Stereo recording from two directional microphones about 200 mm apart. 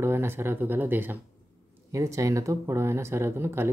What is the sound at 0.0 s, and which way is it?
A man's voice, 10° right (ahead or behind).